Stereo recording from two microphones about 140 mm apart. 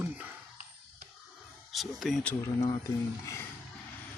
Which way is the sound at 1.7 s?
Centre (ahead or behind).